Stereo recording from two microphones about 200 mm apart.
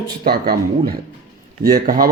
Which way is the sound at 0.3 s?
50° right (ahead or behind).